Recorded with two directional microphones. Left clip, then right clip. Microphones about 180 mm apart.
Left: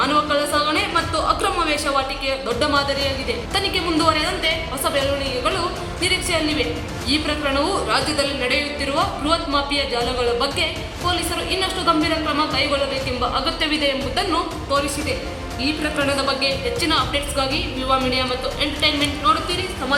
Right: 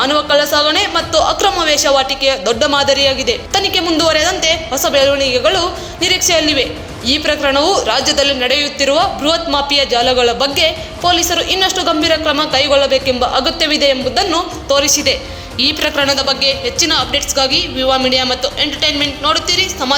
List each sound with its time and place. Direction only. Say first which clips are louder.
0.0 s a woman's voice: right 6 dB; 35° right (ahead or behind)
15.5 s a woman's voice: right 9 dB; 60° right (ahead or behind)
16.0 s a woman's voice: right 6 dB; 35° right (ahead or behind)